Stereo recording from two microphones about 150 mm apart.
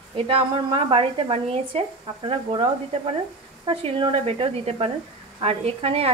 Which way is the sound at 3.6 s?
35° right (ahead or behind).